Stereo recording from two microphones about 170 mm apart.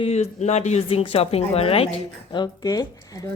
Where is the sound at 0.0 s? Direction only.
40° left (ahead or behind).